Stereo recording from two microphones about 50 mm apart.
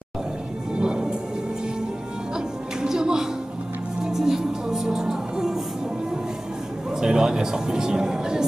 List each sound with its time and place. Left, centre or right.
0.7 s music: centre
2.3 s music: centre
6.9 s speech: centre